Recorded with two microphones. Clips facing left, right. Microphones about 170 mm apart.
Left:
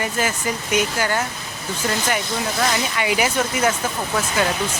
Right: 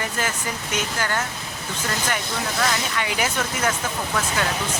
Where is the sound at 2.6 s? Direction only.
10° left (ahead or behind).